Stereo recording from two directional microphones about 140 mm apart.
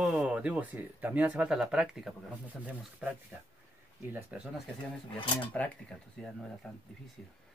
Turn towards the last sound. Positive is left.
turn(degrees=0)  # may be behind; listen again after turning